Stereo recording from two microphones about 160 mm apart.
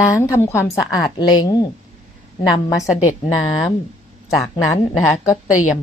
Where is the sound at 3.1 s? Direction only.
20° left (ahead or behind).